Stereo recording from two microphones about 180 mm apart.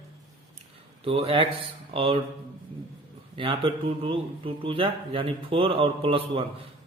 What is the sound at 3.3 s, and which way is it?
Speech, 30° right (ahead or behind).